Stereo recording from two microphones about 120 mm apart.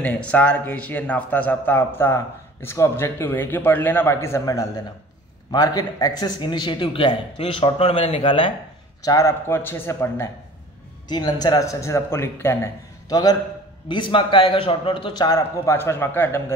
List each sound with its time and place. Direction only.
0.0 s a man's voice: 10° left (ahead or behind); by 8.5 s 45° left (ahead or behind)
9.0 s speech: 30° left (ahead or behind)
9.5 s speech: 20° left (ahead or behind)
11.1 s speech: 35° left (ahead or behind); by 12.7 s 20° left (ahead or behind)
13.1 s a man's voice: 30° left (ahead or behind)